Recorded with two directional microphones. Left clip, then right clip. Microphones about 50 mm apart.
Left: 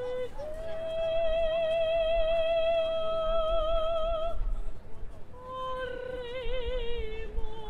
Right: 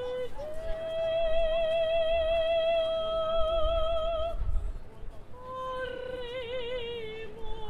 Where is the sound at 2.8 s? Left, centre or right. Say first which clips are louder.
Even; left.